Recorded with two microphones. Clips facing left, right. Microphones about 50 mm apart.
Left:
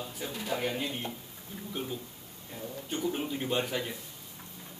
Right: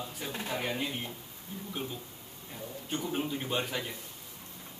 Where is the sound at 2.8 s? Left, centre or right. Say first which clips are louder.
Left 1 dB; centre.